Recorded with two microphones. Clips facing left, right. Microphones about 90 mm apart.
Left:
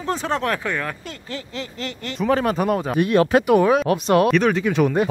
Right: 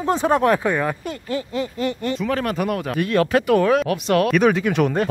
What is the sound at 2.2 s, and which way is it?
Speech, 25° left (ahead or behind).